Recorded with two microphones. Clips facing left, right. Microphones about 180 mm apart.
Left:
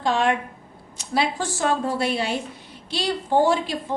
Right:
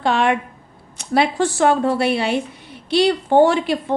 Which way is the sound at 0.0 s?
65° right (ahead or behind).